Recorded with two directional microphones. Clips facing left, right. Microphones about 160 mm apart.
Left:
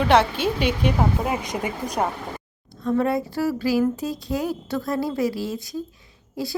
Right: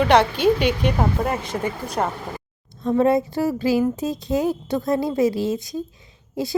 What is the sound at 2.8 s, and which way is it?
Speech, 20° right (ahead or behind).